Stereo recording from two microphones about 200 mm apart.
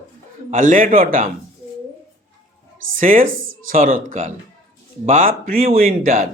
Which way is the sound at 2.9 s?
40° right (ahead or behind).